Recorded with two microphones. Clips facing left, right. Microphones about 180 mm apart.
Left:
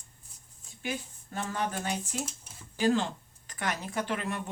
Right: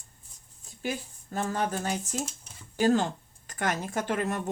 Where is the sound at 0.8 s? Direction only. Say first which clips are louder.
Right 3 dB; 40° right (ahead or behind).